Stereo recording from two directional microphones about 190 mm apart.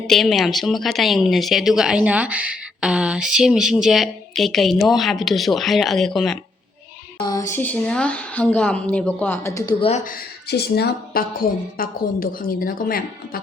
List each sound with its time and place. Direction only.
0.1 s a woman's voice: centre (ahead or behind)
7.3 s a woman's voice: 15° left (ahead or behind)
9.8 s speech: 40° left (ahead or behind)